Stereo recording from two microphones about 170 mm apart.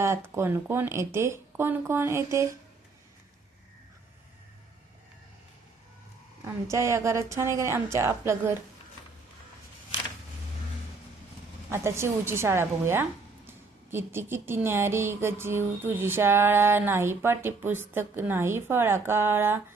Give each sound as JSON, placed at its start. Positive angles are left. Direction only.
{"t": 0.0, "sound": "speech", "side_deg": -15}
{"t": 6.7, "sound": "speech", "side_deg": -15}
{"t": 11.7, "sound": "speech", "side_deg": -15}